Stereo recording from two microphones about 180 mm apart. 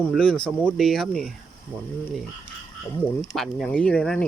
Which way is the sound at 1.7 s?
10° left (ahead or behind).